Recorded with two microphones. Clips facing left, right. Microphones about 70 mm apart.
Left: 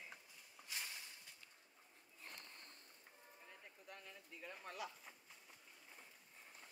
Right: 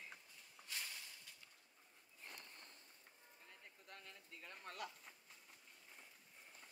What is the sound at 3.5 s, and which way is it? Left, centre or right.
Speech, centre.